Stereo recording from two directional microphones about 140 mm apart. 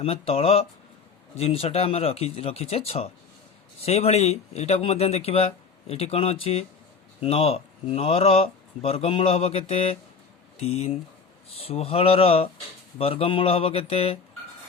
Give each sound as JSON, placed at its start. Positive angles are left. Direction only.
{"t": 0.0, "sound": "speech", "side_deg": 45}